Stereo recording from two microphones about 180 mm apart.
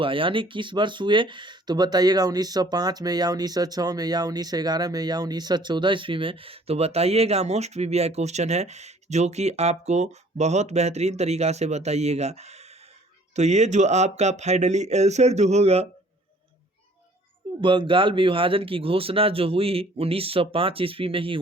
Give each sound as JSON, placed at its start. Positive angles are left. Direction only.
{"t": 0.0, "sound": "speech", "side_deg": -30}
{"t": 17.6, "sound": "speech", "side_deg": -25}